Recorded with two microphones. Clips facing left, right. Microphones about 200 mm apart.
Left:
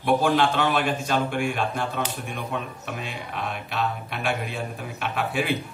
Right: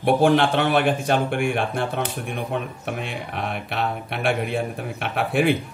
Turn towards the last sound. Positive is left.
turn(degrees=-55)  # may be behind; listen again after turning